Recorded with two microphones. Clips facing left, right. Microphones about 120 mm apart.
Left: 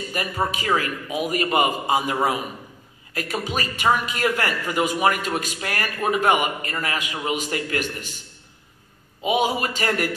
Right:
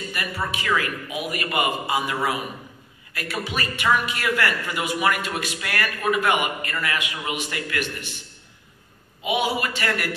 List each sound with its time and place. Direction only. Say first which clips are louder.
0.1 s a man's voice: left 5 dB; 35° left (ahead or behind)
9.2 s a man's voice: left 2 dB; 35° left (ahead or behind)